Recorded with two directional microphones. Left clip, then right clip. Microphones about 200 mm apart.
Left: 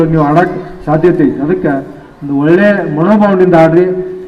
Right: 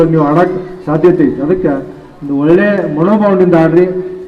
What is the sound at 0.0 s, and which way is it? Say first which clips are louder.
A man's voice: even; 20° left (ahead or behind).